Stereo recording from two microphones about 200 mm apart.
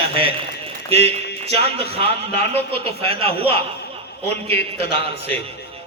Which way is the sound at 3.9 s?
30° right (ahead or behind).